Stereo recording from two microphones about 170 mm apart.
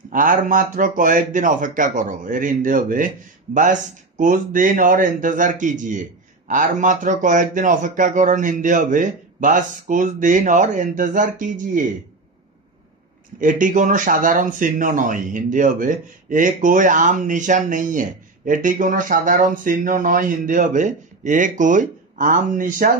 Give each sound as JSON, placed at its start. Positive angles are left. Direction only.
{"t": 0.1, "sound": "speech", "side_deg": -50}
{"t": 13.4, "sound": "speech", "side_deg": -50}